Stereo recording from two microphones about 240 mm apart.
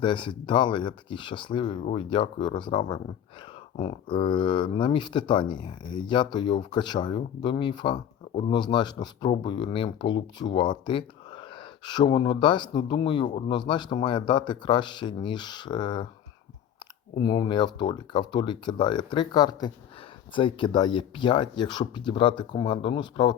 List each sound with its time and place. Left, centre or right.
0.0 s speech: centre
17.2 s speech: centre